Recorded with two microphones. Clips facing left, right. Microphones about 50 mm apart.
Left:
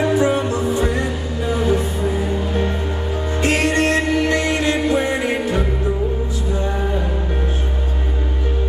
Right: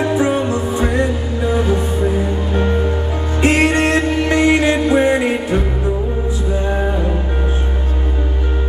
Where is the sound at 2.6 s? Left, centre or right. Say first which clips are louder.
Right 4 dB; centre.